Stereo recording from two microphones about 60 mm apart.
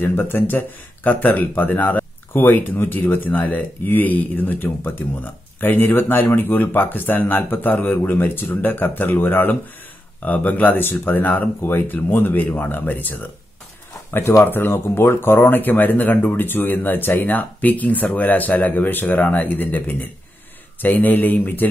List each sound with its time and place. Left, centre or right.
0.0 s speech: left